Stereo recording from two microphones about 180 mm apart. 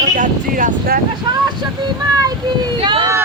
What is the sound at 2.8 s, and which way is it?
Speech, 30° right (ahead or behind).